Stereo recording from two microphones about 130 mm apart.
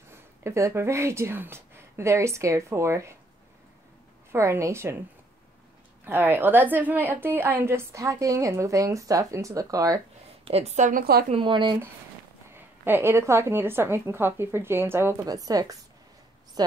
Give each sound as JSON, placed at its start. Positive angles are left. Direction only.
{"t": 0.4, "sound": "a woman's voice", "side_deg": -20}
{"t": 4.3, "sound": "a woman's voice", "side_deg": -20}
{"t": 6.0, "sound": "a woman's voice", "side_deg": -15}
{"t": 10.4, "sound": "a woman's voice", "side_deg": -55}
{"t": 11.3, "sound": "speech", "side_deg": -40}
{"t": 12.5, "sound": "a woman's voice", "side_deg": -15}
{"t": 15.2, "sound": "a woman's voice", "side_deg": -30}
{"t": 16.6, "sound": "a sound", "side_deg": -30}